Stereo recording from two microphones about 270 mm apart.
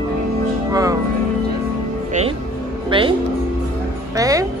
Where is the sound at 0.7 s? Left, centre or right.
Centre.